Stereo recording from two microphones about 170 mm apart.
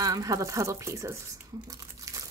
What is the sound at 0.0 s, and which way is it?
Speech, 20° right (ahead or behind).